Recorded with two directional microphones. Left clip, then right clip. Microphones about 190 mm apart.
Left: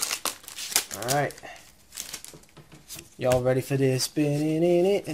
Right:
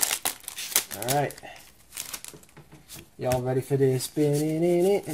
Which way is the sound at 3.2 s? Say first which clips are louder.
Left 4 dB; 30° left (ahead or behind).